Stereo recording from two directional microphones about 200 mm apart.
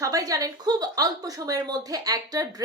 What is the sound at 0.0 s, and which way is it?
Speech, 15° right (ahead or behind).